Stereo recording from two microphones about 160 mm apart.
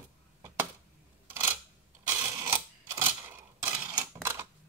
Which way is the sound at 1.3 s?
15° right (ahead or behind).